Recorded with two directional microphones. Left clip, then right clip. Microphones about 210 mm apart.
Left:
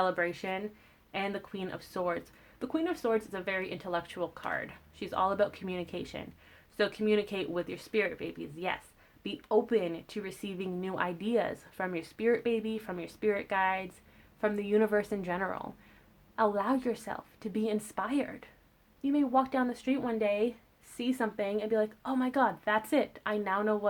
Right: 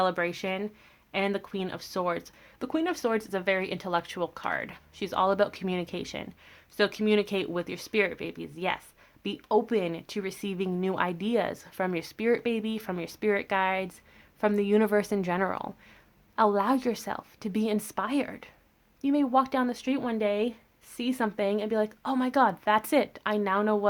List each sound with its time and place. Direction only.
0.0 s speech: 30° right (ahead or behind)